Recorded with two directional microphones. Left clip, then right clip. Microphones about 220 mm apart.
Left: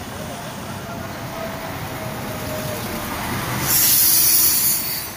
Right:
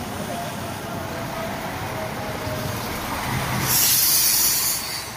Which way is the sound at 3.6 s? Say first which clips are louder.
Left 1 dB; 45° left (ahead or behind).